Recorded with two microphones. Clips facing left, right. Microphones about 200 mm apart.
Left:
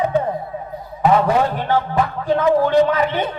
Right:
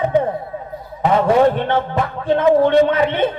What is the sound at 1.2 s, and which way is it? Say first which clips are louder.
Speech: right 5 dB; 25° right (ahead or behind).